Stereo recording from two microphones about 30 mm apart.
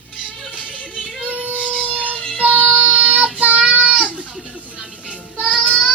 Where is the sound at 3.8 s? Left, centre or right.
Right.